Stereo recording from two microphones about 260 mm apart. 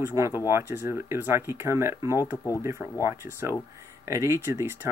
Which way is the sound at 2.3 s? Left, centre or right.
Centre.